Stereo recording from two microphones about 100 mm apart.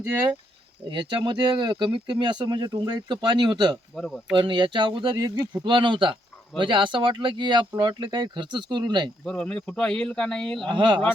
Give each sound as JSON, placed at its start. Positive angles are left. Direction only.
{"t": 0.0, "sound": "speech", "side_deg": -25}
{"t": 0.9, "sound": "speech", "side_deg": -50}
{"t": 3.9, "sound": "speech", "side_deg": 5}
{"t": 4.4, "sound": "speech", "side_deg": -50}
{"t": 5.6, "sound": "speech", "side_deg": -55}
{"t": 9.2, "sound": "speech", "side_deg": 10}
{"t": 10.7, "sound": "speech", "side_deg": -50}